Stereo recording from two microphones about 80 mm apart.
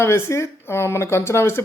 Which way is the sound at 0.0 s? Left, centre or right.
Left.